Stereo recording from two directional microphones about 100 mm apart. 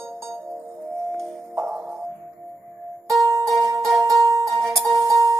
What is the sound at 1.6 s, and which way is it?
Music, 25° right (ahead or behind).